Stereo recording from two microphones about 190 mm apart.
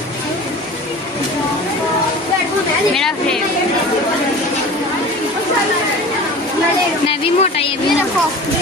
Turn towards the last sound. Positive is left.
turn(degrees=30)  # may be behind; listen again after turning